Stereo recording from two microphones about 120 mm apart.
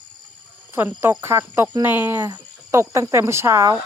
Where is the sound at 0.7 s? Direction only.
20° right (ahead or behind).